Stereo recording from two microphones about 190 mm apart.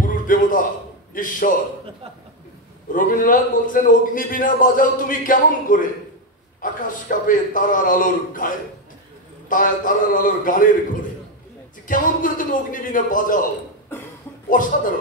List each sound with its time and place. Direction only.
0.0 s a sound: 45° left (ahead or behind)
1.1 s a man's voice: 45° left (ahead or behind)
2.9 s a man's voice: 45° left (ahead or behind)
11.9 s a man's voice: 45° left (ahead or behind)
13.9 s cough: 10° left (ahead or behind)